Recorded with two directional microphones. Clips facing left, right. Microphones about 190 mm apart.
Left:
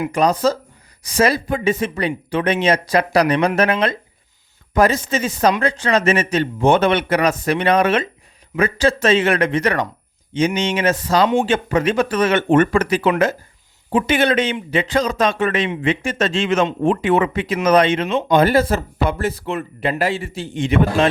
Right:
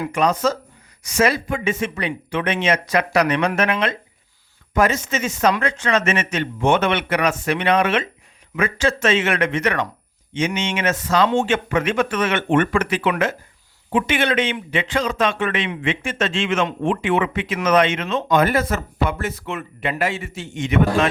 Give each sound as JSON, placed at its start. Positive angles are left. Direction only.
{"t": 0.1, "sound": "speech", "side_deg": 35}